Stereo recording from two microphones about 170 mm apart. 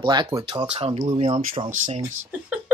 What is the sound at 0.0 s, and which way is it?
Speech, 25° right (ahead or behind).